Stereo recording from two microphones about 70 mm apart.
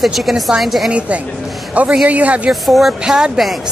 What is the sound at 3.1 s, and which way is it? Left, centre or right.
Speech, centre.